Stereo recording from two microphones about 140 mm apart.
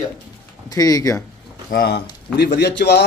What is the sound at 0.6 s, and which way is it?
Speech, 25° left (ahead or behind).